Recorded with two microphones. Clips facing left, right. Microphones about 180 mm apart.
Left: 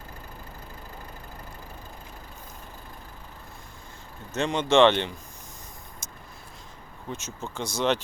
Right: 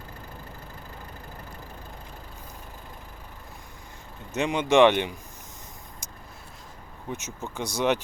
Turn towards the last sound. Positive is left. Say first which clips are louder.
# right 1 dB
turn(degrees=-15)  # may be behind; listen again after turning